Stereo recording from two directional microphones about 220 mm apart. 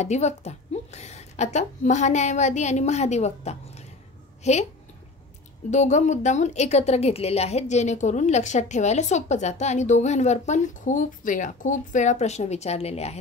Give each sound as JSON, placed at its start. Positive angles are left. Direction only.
{"t": 0.0, "sound": "a woman's voice", "side_deg": 30}
{"t": 5.7, "sound": "a woman's voice", "side_deg": 30}